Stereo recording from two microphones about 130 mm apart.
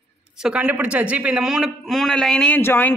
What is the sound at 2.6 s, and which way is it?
Speech, 15° left (ahead or behind).